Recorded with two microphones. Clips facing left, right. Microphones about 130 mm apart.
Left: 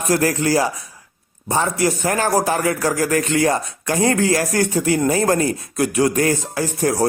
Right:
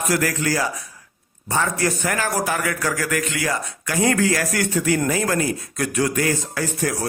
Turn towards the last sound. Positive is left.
turn(degrees=25)  # may be behind; listen again after turning